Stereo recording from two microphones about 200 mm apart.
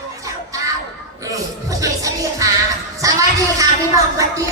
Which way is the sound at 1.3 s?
15° right (ahead or behind).